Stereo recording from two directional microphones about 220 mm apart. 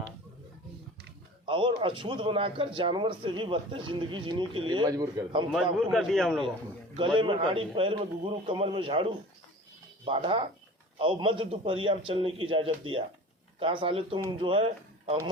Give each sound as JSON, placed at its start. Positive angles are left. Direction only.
{"t": 1.5, "sound": "a man's voice", "side_deg": -20}
{"t": 5.9, "sound": "a man's voice", "side_deg": 0}
{"t": 6.9, "sound": "a man's voice", "side_deg": -25}